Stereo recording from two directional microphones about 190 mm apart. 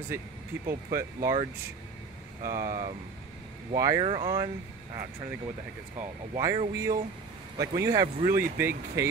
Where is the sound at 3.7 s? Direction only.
20° right (ahead or behind).